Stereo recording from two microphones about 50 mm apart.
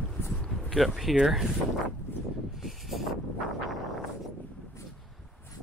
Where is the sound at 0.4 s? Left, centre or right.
Centre.